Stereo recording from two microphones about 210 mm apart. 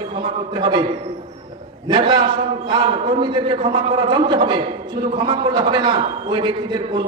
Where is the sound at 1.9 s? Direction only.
20° right (ahead or behind).